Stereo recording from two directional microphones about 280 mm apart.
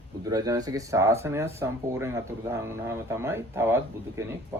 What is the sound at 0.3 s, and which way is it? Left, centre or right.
Speech, centre.